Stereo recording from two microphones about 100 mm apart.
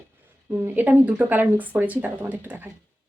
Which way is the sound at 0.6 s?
15° right (ahead or behind).